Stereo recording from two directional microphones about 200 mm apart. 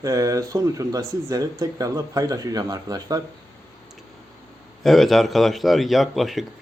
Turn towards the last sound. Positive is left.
turn(degrees=0)  # may be behind; listen again after turning